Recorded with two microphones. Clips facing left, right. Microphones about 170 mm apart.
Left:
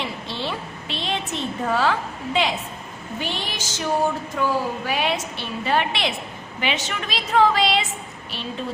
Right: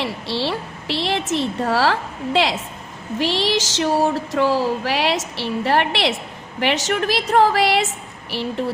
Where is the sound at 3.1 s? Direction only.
85° right.